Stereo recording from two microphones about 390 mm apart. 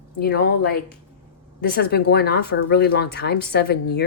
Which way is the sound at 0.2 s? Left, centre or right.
Left.